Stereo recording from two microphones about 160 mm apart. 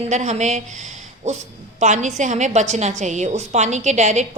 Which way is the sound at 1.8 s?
50° right (ahead or behind).